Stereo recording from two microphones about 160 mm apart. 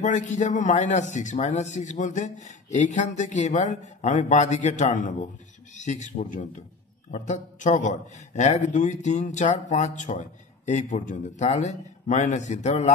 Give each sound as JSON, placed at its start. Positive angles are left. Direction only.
{"t": 0.0, "sound": "a man's voice", "side_deg": 50}